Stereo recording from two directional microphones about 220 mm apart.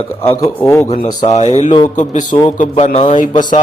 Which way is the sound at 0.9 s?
25° left (ahead or behind).